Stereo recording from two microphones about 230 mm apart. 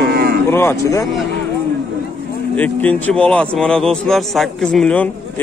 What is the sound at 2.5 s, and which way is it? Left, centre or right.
Speech, centre.